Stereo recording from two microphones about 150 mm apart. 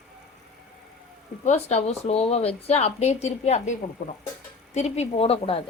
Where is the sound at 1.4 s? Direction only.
45° left (ahead or behind).